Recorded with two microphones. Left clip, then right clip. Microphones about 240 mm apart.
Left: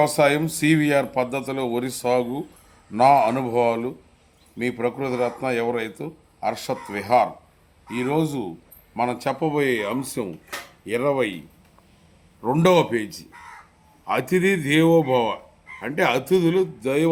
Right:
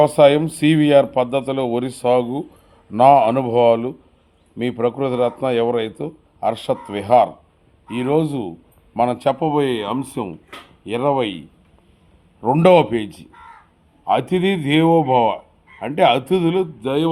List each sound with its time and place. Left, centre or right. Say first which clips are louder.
0.0 s speech: right 6 dB; right
12.4 s speech: right 6 dB; right